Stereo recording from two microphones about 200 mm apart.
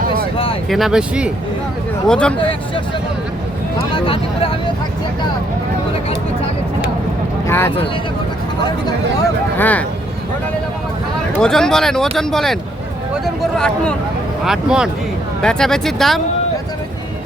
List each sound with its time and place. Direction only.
0.0 s a sound: 50° right (ahead or behind)
0.7 s speech: centre (ahead or behind)
3.9 s speech: 25° left (ahead or behind)
7.4 s vehicle: 10° left (ahead or behind)
9.6 s speech: 10° left (ahead or behind)
11.3 s speech: 5° left (ahead or behind)